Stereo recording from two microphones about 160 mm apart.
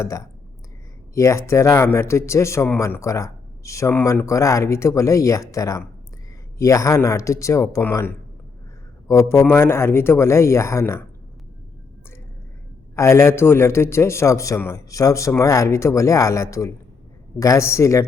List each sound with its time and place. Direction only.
0.0 s speech: 20° left (ahead or behind)
13.0 s speech: 15° left (ahead or behind)